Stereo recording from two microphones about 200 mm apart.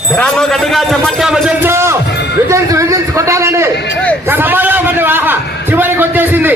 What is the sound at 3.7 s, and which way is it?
Speech, 60° left (ahead or behind).